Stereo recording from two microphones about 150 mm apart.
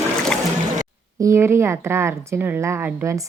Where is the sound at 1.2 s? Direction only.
20° right (ahead or behind).